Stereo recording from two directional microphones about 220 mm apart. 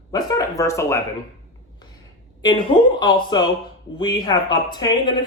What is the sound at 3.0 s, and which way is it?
Speech, 20° left (ahead or behind).